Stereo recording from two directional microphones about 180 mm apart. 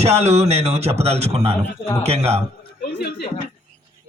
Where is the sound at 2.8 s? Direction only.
60° left (ahead or behind).